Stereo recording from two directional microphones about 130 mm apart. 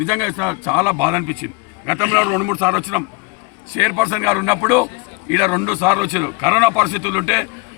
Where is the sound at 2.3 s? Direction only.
10° right (ahead or behind).